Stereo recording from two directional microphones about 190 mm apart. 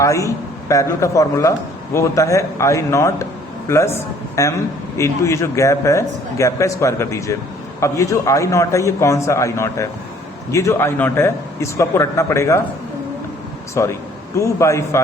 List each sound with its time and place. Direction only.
0.0 s a man's voice: 15° left (ahead or behind)
13.8 s a man's voice: 15° left (ahead or behind)